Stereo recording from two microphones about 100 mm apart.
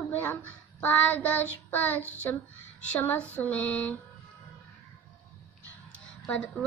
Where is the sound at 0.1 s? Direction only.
20° left (ahead or behind).